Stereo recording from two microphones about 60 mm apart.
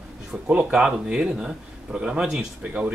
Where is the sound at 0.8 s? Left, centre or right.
Centre.